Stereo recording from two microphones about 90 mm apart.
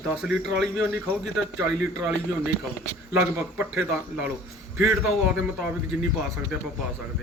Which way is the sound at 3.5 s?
15° right (ahead or behind).